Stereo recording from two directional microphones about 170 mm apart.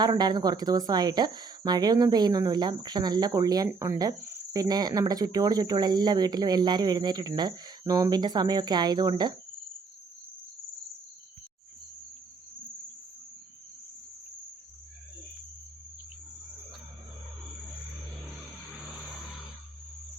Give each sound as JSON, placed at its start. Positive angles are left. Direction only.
{"t": 0.0, "sound": "speech", "side_deg": -25}